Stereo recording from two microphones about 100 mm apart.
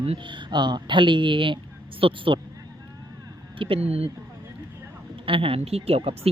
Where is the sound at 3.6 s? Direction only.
75° right (ahead or behind).